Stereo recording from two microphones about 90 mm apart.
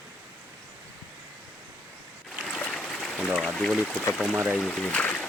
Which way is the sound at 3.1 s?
5° right (ahead or behind).